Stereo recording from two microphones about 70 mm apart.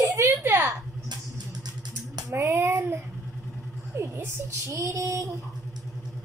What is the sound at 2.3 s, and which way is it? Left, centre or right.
Speech, right.